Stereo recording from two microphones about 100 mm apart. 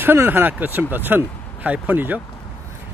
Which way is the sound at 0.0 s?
20° right (ahead or behind).